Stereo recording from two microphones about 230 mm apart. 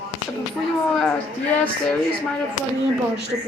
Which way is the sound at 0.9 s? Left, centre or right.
Centre.